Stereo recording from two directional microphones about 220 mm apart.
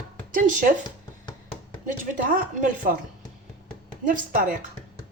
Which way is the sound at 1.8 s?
35° right (ahead or behind).